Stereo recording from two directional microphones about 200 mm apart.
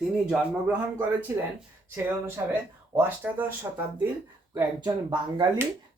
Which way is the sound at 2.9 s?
10° right (ahead or behind).